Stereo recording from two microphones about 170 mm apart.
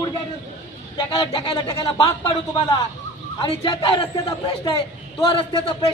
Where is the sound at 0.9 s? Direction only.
25° left (ahead or behind).